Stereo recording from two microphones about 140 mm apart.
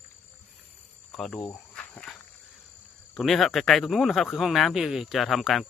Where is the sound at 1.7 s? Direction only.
10° left (ahead or behind).